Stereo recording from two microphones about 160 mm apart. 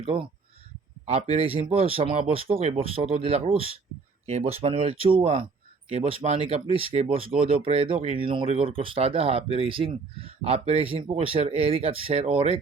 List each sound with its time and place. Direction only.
0.0 s speech: 35° right (ahead or behind)